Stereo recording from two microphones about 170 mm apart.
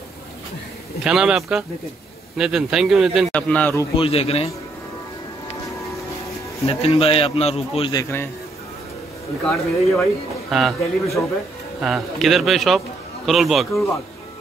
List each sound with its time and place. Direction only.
1.0 s a man's voice: 5° right (ahead or behind)
3.9 s a man's voice: 35° left (ahead or behind)
6.6 s a man's voice: 35° left (ahead or behind)
7.9 s a man's voice: 15° left (ahead or behind)
9.4 s a man's voice: 5° left (ahead or behind)